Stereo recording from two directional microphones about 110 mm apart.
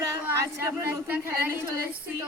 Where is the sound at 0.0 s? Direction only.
25° right (ahead or behind).